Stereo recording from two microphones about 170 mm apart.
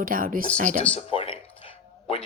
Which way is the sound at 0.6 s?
45° right (ahead or behind).